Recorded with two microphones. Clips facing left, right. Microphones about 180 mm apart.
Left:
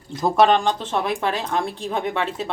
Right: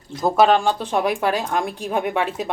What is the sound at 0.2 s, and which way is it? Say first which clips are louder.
Speech: right 1 dB; centre (ahead or behind).